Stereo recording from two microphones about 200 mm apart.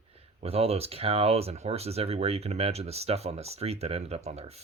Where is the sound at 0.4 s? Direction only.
30° right (ahead or behind).